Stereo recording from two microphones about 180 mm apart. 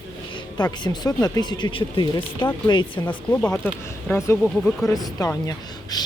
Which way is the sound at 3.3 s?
10° left (ahead or behind).